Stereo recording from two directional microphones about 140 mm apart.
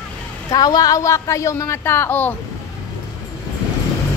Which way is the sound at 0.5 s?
25° left (ahead or behind).